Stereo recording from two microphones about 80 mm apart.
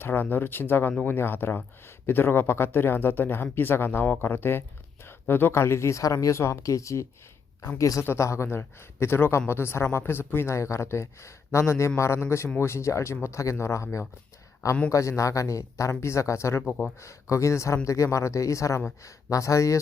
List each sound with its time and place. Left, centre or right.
0.0 s speech: left
14.8 s speech: left